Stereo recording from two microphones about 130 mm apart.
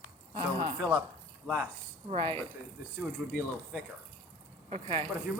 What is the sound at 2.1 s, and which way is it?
Speech, 40° right (ahead or behind).